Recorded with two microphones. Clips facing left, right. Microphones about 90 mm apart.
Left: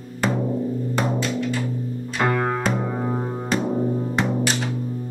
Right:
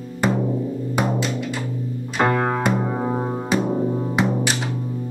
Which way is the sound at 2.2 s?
20° right (ahead or behind).